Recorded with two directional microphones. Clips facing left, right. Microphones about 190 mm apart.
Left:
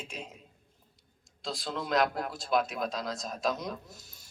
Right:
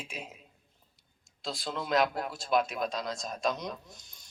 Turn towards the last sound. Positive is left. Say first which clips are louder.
# left 3 dB
turn(degrees=5)  # may be behind; listen again after turning